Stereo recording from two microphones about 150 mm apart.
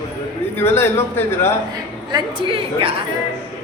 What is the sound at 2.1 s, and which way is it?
Speech, 30° right (ahead or behind).